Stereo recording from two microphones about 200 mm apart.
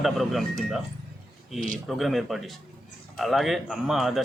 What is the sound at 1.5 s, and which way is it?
Speech, 40° right (ahead or behind).